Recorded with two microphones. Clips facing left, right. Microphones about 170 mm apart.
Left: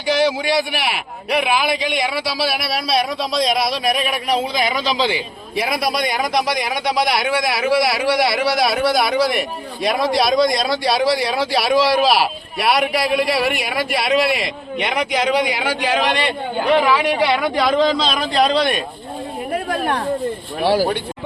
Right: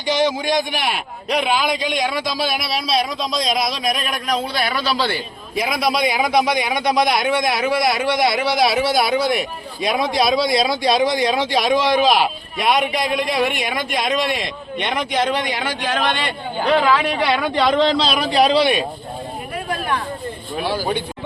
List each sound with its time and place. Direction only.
0.0 s speech: 5° left (ahead or behind)
2.8 s speech: 55° left (ahead or behind)
3.5 s speech: 5° left (ahead or behind)
4.4 s speech: 15° left (ahead or behind)
5.5 s speech: centre (ahead or behind)
19.5 s a sound: 45° left (ahead or behind)